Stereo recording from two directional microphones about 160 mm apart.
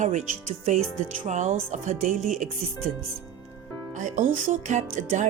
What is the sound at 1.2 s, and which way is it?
Speech, 50° right (ahead or behind).